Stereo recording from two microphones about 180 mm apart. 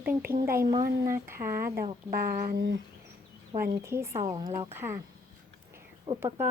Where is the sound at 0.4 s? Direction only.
15° right (ahead or behind).